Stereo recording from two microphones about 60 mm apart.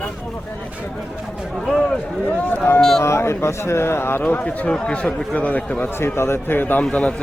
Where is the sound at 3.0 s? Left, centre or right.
Left.